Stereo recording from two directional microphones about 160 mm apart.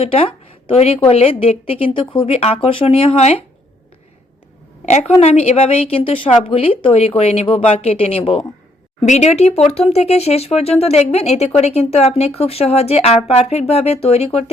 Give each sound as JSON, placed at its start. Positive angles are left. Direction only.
{"t": 0.0, "sound": "speech", "side_deg": 35}
{"t": 4.9, "sound": "a woman's voice", "side_deg": 45}